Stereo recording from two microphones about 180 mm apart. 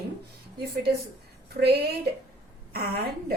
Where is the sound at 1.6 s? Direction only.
60° right (ahead or behind).